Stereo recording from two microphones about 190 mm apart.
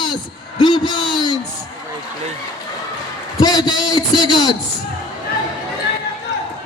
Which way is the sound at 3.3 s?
20° left (ahead or behind).